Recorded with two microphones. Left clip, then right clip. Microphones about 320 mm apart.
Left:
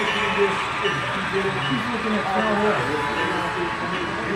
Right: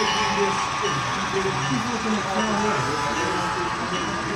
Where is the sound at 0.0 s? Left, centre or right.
Right.